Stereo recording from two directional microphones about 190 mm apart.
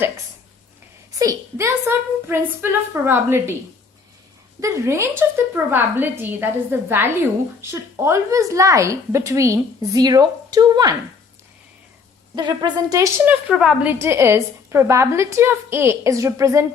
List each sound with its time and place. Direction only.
1.2 s a woman's voice: 15° right (ahead or behind)
4.6 s a woman's voice: 15° right (ahead or behind)
12.4 s a woman's voice: 25° right (ahead or behind)
13.2 s a woman's voice: 5° right (ahead or behind)